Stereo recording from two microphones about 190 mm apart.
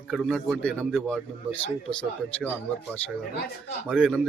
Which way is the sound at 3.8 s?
Centre (ahead or behind).